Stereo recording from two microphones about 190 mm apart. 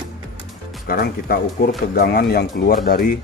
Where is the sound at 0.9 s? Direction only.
50° left (ahead or behind).